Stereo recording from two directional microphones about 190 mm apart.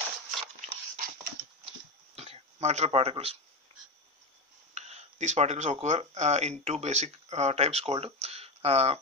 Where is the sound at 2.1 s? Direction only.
35° right (ahead or behind).